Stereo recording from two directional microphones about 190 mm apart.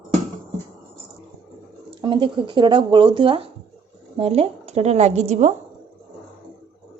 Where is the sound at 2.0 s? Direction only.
25° right (ahead or behind).